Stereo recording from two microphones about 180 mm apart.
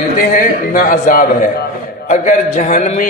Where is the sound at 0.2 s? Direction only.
50° left (ahead or behind).